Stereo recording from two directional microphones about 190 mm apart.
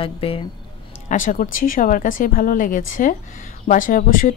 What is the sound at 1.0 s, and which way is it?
A woman's voice, 45° left (ahead or behind).